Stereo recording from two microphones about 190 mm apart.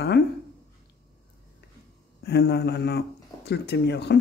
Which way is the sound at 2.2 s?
60° left (ahead or behind).